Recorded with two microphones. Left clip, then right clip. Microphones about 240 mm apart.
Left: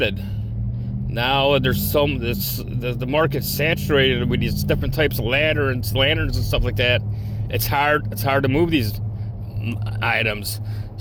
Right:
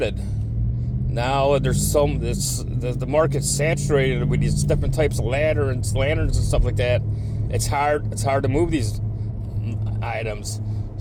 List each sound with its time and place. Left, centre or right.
0.0 s speech: left
9.6 s speech: left